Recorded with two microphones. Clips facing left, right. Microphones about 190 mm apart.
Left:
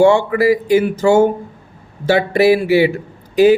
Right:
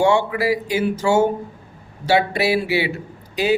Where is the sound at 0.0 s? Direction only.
50° left (ahead or behind).